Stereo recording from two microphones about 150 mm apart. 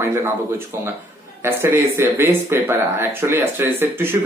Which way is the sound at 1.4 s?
15° right (ahead or behind).